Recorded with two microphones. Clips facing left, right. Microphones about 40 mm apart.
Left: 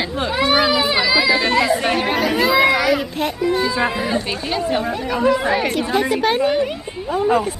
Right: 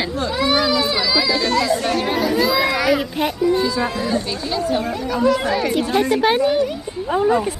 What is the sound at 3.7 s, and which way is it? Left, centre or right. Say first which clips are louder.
Speech: left 1 dB; left.